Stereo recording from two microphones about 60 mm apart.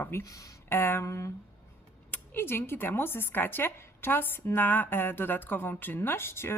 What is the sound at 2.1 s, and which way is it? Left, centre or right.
A woman's voice, left.